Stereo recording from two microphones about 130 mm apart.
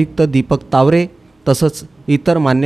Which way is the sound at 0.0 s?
Centre (ahead or behind).